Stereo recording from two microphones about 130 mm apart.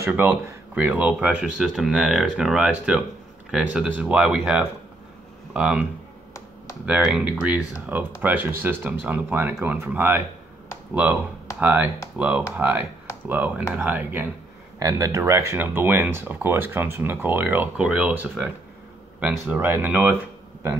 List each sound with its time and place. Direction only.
0.0 s speech: 15° right (ahead or behind)
6.9 s speech: 5° right (ahead or behind)
11.6 s speech: 15° right (ahead or behind)
14.8 s speech: 25° right (ahead or behind)